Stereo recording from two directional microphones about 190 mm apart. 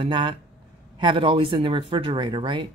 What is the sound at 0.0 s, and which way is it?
Speech, 25° right (ahead or behind).